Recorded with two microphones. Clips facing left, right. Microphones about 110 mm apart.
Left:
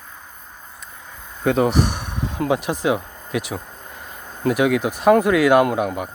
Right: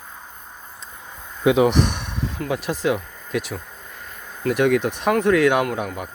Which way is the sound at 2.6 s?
15° left (ahead or behind).